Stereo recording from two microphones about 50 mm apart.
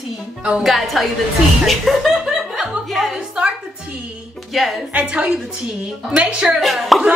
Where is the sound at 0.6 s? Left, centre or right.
Centre.